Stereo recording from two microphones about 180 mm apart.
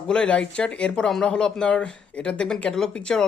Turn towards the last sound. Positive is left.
turn(degrees=5)  # may be behind; listen again after turning